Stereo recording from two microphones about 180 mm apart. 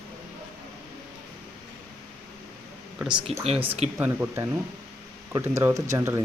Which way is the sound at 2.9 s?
5° right (ahead or behind).